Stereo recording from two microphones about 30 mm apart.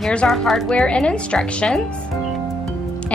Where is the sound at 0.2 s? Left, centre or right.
Left.